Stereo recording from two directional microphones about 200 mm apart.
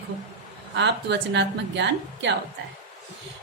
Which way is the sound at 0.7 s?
60° right (ahead or behind).